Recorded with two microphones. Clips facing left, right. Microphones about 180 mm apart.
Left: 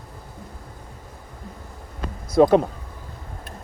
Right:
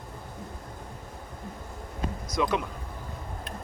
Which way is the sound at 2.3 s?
45° left (ahead or behind).